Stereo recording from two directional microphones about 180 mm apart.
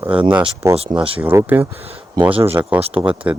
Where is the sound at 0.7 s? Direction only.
30° right (ahead or behind).